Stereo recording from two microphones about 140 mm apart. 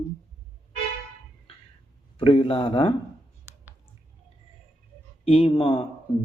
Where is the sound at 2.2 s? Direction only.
40° left (ahead or behind).